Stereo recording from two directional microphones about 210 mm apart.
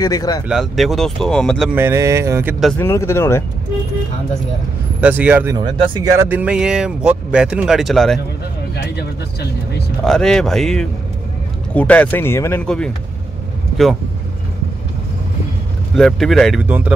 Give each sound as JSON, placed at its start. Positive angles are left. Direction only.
{"t": 0.0, "sound": "speech", "side_deg": 20}
{"t": 0.5, "sound": "speech", "side_deg": 0}
{"t": 1.8, "sound": "speech", "side_deg": -10}
{"t": 2.8, "sound": "speech", "side_deg": 10}
{"t": 5.0, "sound": "speech", "side_deg": -5}
{"t": 8.7, "sound": "speech", "side_deg": 50}
{"t": 10.0, "sound": "speech", "side_deg": 0}
{"t": 16.0, "sound": "speech", "side_deg": 0}